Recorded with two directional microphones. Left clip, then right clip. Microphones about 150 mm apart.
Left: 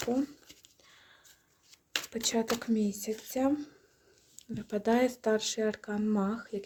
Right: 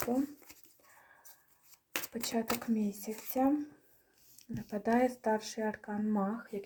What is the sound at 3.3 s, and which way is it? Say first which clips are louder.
Speech: even; 35° left (ahead or behind).